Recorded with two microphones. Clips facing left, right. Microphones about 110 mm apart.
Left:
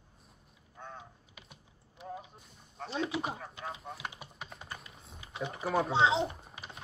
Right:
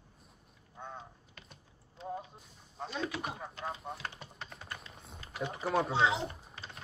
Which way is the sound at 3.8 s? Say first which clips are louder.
Right 2 dB; centre (ahead or behind).